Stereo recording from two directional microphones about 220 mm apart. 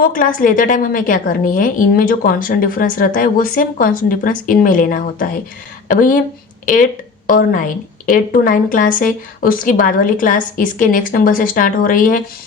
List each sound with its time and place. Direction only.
0.0 s a woman's voice: 40° left (ahead or behind)
7.3 s a woman's voice: 40° left (ahead or behind)